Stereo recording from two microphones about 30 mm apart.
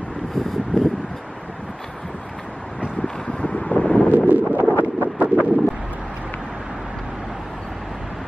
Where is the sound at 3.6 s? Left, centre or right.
Left.